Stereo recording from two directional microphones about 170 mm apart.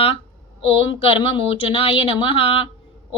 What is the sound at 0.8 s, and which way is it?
Speech, 30° left (ahead or behind).